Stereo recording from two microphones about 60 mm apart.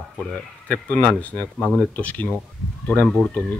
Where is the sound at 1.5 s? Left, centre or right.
Centre.